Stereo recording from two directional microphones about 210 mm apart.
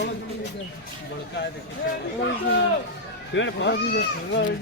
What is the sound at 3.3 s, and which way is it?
Speech, 60° left (ahead or behind).